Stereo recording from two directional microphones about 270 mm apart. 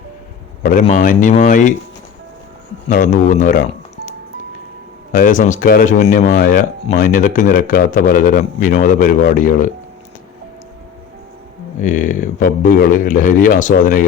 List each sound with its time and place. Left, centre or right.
0.6 s speech: left
2.9 s speech: left
5.1 s speech: left
11.8 s speech: left